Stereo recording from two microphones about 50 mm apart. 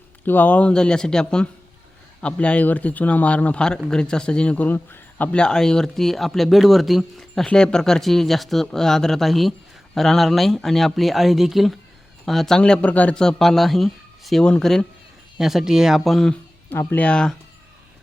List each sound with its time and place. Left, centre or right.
0.3 s speech: left
0.7 s speech: centre
4.7 s a man's voice: left
5.3 s a man's voice: centre
7.2 s a man's voice: centre
12.5 s speech: centre
12.8 s speech: left
13.1 s speech: centre
15.4 s speech: centre
16.6 s speech: left
17.1 s speech: centre